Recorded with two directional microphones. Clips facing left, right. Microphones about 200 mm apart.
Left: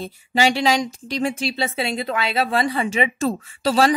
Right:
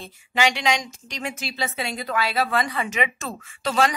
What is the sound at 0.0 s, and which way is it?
Speech, 35° left (ahead or behind).